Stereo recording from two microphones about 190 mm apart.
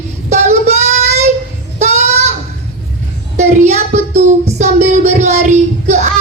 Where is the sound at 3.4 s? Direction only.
35° right (ahead or behind).